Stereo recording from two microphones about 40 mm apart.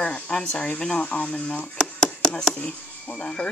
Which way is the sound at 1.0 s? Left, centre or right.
Left.